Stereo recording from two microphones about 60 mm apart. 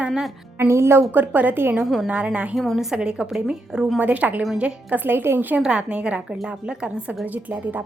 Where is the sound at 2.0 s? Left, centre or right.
Right.